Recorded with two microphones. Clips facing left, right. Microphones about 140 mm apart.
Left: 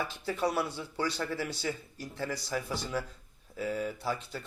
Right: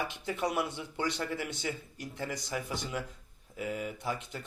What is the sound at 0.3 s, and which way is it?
A man's voice, 20° right (ahead or behind).